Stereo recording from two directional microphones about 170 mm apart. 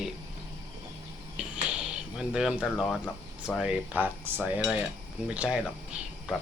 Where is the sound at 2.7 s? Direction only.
Centre (ahead or behind).